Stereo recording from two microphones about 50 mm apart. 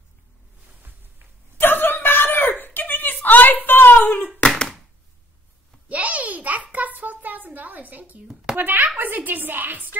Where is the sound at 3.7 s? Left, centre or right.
Left.